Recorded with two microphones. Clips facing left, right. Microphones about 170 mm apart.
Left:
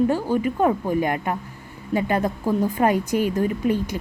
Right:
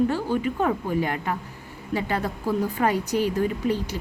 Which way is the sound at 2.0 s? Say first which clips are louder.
Left 5 dB; 50° left (ahead or behind).